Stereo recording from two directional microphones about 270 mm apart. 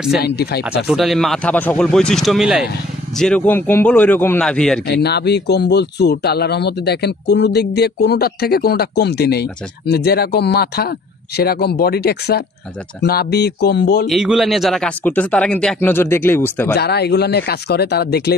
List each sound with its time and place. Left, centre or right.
0.2 s speech: left
0.7 s a man's voice: centre
4.8 s speech: left
14.0 s speech: centre
16.7 s speech: left